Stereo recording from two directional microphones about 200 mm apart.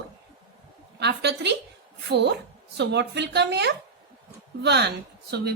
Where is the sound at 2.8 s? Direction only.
60° right (ahead or behind).